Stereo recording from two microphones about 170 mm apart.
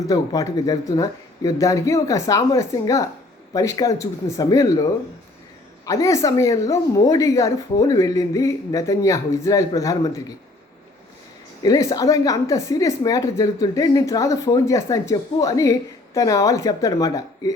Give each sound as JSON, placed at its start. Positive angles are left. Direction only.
{"t": 0.1, "sound": "a woman's voice", "side_deg": 20}
{"t": 11.6, "sound": "a woman's voice", "side_deg": 20}